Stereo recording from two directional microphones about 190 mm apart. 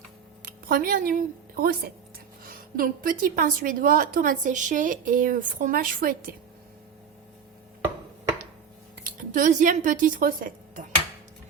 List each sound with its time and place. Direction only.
0.4 s a woman's voice: 50° right (ahead or behind)
9.0 s speech: 45° right (ahead or behind)